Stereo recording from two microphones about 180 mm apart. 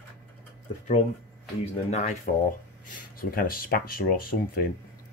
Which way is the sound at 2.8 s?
50° left (ahead or behind).